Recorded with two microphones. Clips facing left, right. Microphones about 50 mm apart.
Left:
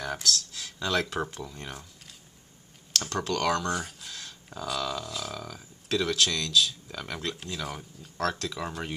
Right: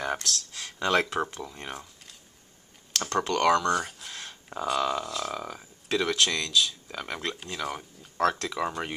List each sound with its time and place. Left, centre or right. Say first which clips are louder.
0.0 s a sound: right 1 dB; right
1.0 s speech: right 2 dB; centre
3.2 s speech: right 5 dB; centre
3.6 s speech: right 5 dB; centre
4.1 s a sound: right 2 dB; right
4.5 s grunt: right 5 dB; right
5.0 s grunt: right 4 dB; centre
5.3 s grunt: right 4 dB; centre
5.6 s speech: even; centre